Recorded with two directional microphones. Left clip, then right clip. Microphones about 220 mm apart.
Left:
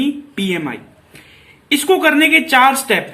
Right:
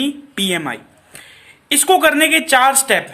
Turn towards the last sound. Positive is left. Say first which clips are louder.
# left 1 dB
turn(degrees=-30)  # may be behind; listen again after turning